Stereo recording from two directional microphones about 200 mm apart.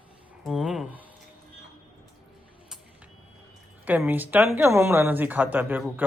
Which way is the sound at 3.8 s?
10° right (ahead or behind).